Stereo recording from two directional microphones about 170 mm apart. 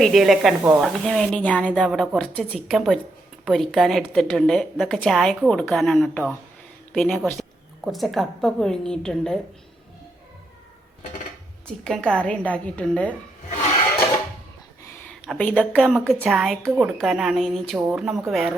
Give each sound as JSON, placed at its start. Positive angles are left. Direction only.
{"t": 0.0, "sound": "a woman's voice", "side_deg": 0}
{"t": 0.9, "sound": "a woman's voice", "side_deg": 5}
{"t": 11.8, "sound": "a woman's voice", "side_deg": 5}
{"t": 15.3, "sound": "a woman's voice", "side_deg": 10}